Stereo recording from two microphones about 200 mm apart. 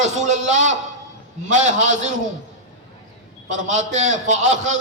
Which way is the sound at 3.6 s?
40° right (ahead or behind).